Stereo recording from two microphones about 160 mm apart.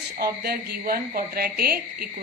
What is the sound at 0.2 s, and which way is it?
A woman's voice, 65° right (ahead or behind).